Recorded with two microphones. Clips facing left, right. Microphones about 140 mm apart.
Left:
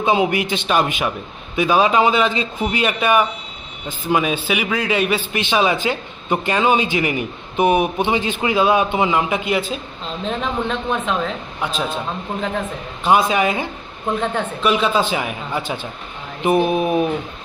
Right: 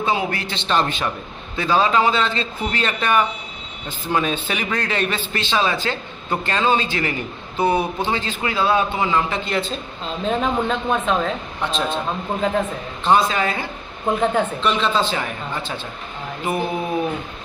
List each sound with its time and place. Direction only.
0.0 s a man's voice: 20° left (ahead or behind)
10.2 s a man's voice: centre (ahead or behind); by 17.0 s 20° left (ahead or behind)